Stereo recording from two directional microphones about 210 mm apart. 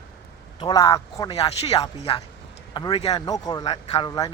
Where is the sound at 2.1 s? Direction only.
25° left (ahead or behind).